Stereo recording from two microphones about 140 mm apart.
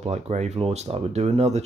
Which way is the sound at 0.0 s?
50° right (ahead or behind).